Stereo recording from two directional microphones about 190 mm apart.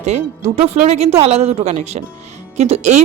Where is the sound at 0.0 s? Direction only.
35° right (ahead or behind).